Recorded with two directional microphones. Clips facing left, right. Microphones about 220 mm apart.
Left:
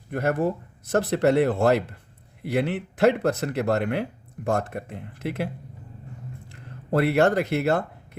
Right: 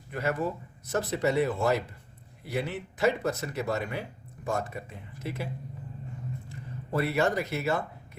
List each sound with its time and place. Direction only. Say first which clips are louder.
0.1 s speech: left 6 dB; 55° left (ahead or behind)
6.9 s speech: left 7 dB; 65° left (ahead or behind)